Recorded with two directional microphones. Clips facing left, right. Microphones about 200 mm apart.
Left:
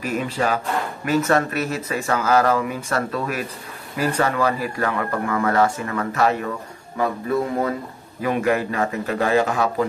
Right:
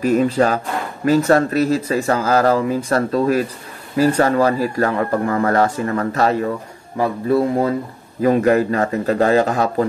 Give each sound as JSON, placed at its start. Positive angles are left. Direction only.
{"t": 0.0, "sound": "speech", "side_deg": -40}